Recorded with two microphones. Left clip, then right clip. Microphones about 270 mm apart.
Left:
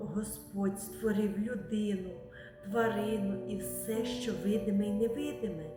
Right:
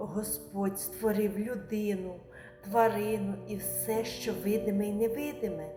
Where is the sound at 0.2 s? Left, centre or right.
Centre.